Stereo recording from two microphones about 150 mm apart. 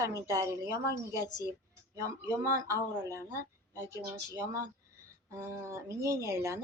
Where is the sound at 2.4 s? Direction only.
20° right (ahead or behind).